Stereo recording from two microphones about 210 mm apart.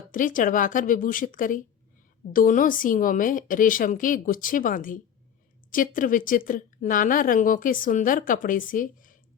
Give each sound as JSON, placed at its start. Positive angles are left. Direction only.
{"t": 0.1, "sound": "a woman's voice", "side_deg": 40}